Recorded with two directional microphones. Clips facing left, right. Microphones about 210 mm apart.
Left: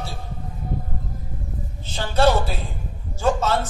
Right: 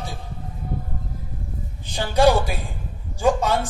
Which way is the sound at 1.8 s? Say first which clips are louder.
Right 2 dB; 15° right (ahead or behind).